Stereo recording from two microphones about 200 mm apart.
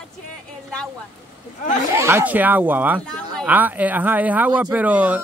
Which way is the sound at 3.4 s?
10° right (ahead or behind).